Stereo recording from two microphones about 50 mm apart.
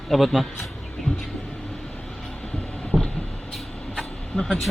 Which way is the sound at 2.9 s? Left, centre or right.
Centre.